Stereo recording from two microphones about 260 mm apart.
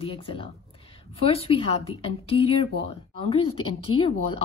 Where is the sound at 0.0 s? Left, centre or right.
Left.